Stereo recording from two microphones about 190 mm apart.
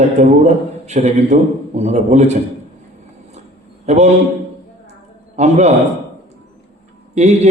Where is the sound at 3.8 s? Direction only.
35° right (ahead or behind).